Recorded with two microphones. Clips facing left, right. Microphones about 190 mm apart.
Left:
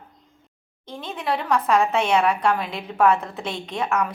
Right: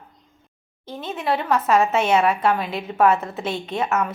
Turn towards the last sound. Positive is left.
turn(degrees=-5)  # may be behind; listen again after turning